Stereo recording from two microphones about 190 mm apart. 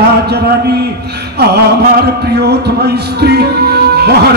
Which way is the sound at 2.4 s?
60° right (ahead or behind).